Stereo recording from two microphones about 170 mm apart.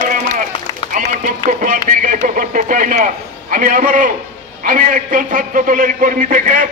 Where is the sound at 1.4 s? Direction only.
50° right (ahead or behind).